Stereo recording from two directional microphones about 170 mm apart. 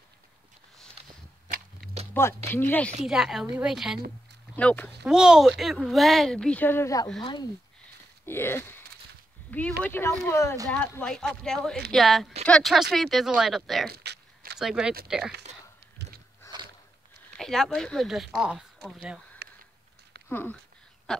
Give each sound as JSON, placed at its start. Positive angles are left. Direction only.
{"t": 1.0, "sound": "whip", "side_deg": -35}
{"t": 2.2, "sound": "speech", "side_deg": 15}
{"t": 3.1, "sound": "speech", "side_deg": -5}
{"t": 4.6, "sound": "speech", "side_deg": 10}
{"t": 5.0, "sound": "speech", "side_deg": -5}
{"t": 8.3, "sound": "speech", "side_deg": 15}
{"t": 13.8, "sound": "a sound", "side_deg": -70}
{"t": 14.6, "sound": "speech", "side_deg": -5}
{"t": 16.5, "sound": "a sound", "side_deg": 20}
{"t": 17.4, "sound": "speech", "side_deg": 0}
{"t": 20.2, "sound": "speech", "side_deg": 10}
{"t": 21.1, "sound": "a sound", "side_deg": 0}